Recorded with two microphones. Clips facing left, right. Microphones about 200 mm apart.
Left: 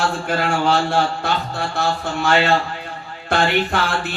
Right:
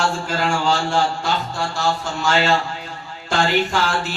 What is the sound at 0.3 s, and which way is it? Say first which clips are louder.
Speech: left 4 dB; 55° left (ahead or behind).